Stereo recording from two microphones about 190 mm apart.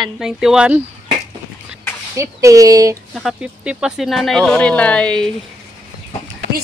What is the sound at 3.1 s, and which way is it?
Speech, 5° right (ahead or behind).